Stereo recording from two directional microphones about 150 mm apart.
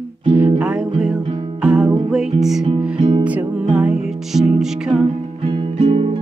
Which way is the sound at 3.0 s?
35° right (ahead or behind).